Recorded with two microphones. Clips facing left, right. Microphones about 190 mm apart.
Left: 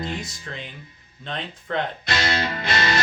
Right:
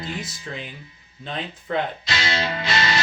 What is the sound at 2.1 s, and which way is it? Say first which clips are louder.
Music: left 1 dB; 55° left (ahead or behind).